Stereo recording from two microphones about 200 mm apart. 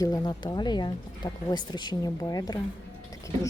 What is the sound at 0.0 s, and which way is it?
Speech, 20° left (ahead or behind).